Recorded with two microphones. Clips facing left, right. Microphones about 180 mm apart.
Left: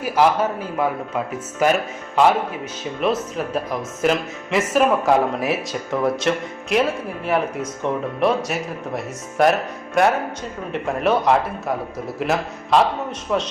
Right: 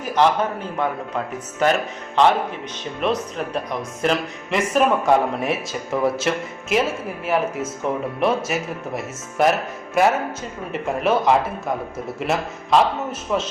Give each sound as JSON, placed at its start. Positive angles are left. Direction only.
{"t": 0.0, "sound": "speech", "side_deg": 5}
{"t": 3.0, "sound": "speech", "side_deg": 0}